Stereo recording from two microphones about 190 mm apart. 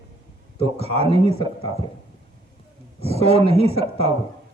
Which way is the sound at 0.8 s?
30° right (ahead or behind).